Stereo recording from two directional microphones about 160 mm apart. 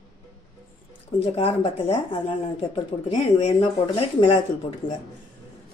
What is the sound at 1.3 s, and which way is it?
Speech, 35° left (ahead or behind).